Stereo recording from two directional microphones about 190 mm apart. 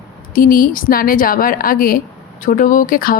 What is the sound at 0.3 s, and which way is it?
A woman's voice, 50° left (ahead or behind).